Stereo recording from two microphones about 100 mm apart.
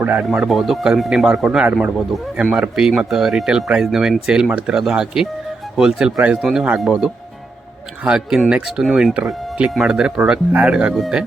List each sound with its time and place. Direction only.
0.0 s speech: 15° right (ahead or behind)
0.3 s speech: centre (ahead or behind)